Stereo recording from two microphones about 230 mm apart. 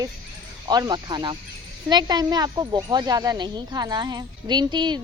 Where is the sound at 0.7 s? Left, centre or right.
Centre.